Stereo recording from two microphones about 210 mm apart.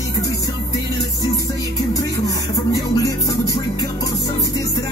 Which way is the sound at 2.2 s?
15° left (ahead or behind).